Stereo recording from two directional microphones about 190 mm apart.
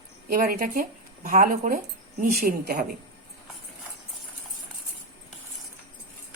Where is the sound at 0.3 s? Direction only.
50° right (ahead or behind).